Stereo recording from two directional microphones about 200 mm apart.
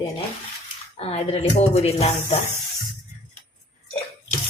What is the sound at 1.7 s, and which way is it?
Music, 30° left (ahead or behind).